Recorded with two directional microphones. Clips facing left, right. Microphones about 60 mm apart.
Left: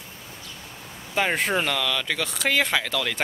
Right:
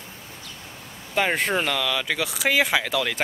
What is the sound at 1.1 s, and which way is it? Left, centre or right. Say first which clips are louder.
Speech: right 1 dB; centre.